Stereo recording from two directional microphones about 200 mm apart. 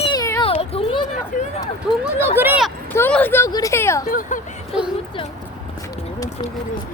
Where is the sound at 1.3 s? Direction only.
40° left (ahead or behind).